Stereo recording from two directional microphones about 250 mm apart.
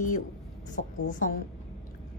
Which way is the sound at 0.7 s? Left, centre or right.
Left.